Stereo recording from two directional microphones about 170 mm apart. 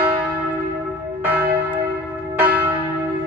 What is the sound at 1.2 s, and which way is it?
Church bell, 10° right (ahead or behind).